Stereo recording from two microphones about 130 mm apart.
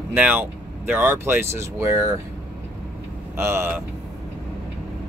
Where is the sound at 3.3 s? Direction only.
20° right (ahead or behind).